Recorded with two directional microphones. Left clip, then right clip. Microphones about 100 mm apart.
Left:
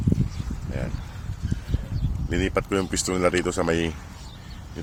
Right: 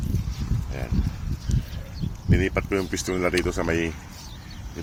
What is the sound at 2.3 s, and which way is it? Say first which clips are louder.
Speech: even; 35° left (ahead or behind).